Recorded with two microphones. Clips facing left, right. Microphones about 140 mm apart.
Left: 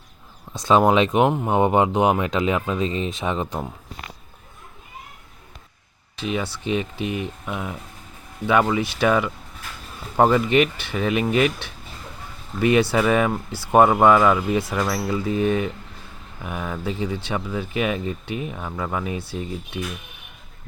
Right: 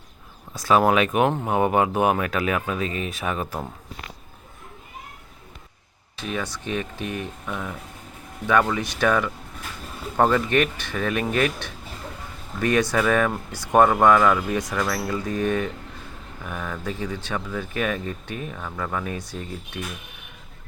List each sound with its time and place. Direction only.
0.6 s speech: 20° left (ahead or behind)
6.2 s speech: 10° left (ahead or behind)
12.5 s speech: 10° left (ahead or behind)